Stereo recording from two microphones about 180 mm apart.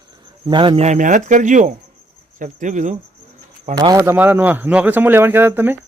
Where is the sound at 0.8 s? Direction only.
45° right (ahead or behind).